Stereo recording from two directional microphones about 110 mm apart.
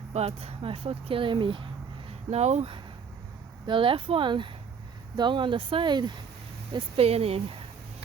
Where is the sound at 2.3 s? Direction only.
80° right.